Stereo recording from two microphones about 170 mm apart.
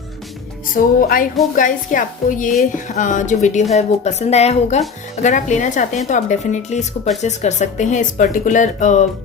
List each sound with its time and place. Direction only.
0.8 s music: 55° left (ahead or behind)
1.5 s a woman's voice: 50° left (ahead or behind)